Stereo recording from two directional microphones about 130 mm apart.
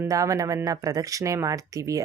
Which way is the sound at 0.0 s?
25° right (ahead or behind).